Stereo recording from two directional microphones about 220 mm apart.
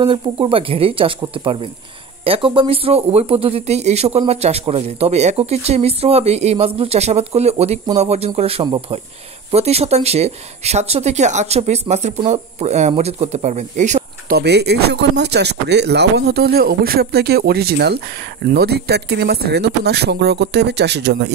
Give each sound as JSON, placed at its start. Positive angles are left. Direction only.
{"t": 0.0, "sound": "speech", "side_deg": -25}
{"t": 14.4, "sound": "speech", "side_deg": -50}